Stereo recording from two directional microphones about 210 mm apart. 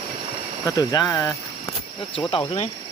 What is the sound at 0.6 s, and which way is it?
Speech, 15° left (ahead or behind).